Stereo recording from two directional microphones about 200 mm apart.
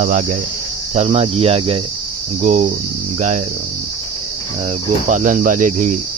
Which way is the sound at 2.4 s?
40° right (ahead or behind).